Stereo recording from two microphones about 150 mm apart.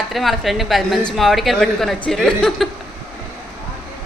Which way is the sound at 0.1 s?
Centre (ahead or behind).